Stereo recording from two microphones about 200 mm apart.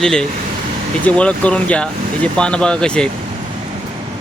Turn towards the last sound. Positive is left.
turn(degrees=5)  # may be behind; listen again after turning